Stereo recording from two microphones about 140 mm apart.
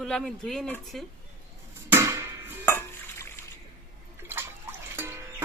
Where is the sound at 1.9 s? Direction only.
20° right (ahead or behind).